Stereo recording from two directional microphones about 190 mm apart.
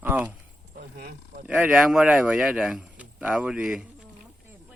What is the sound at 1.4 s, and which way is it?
Speech, 5° right (ahead or behind).